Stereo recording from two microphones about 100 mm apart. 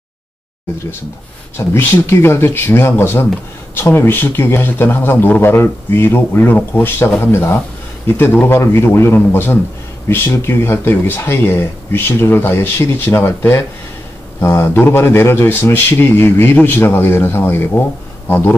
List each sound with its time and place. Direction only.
1.7 s a man's voice: 25° left (ahead or behind)